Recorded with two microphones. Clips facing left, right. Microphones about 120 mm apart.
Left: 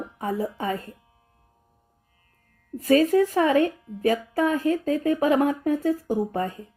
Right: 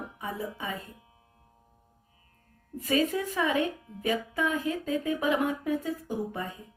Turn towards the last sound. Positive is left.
turn(degrees=45)  # may be behind; listen again after turning